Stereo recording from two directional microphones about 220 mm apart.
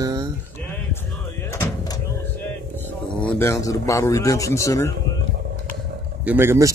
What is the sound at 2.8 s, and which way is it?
Speech, 10° left (ahead or behind).